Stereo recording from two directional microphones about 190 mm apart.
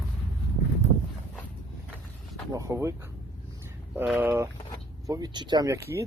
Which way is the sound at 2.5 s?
15° right (ahead or behind).